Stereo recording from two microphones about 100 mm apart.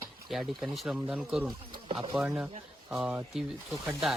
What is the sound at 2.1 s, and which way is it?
Speech, 5° right (ahead or behind).